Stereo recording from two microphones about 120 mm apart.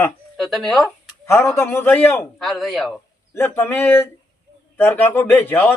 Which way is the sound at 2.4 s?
Centre (ahead or behind).